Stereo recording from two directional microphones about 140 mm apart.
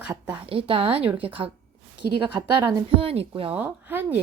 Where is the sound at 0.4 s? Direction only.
40° right (ahead or behind).